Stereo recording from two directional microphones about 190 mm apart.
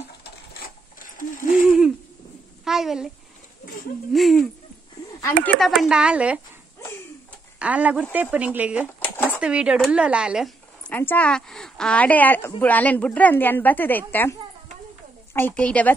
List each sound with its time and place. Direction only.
0.2 s mechanisms: 50° left (ahead or behind)
2.6 s a sound: centre (ahead or behind)
4.1 s speech: centre (ahead or behind)
7.5 s speech: 5° right (ahead or behind)
9.0 s a sound: 10° left (ahead or behind)
9.4 s speech: 5° right (ahead or behind)
10.9 s a woman's voice: 10° left (ahead or behind)
15.3 s a woman's voice: 10° left (ahead or behind)